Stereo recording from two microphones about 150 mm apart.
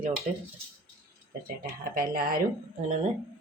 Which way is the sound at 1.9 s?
75° right (ahead or behind).